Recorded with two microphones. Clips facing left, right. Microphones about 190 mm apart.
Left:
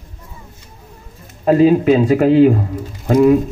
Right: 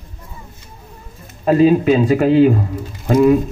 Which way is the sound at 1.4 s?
45° left (ahead or behind).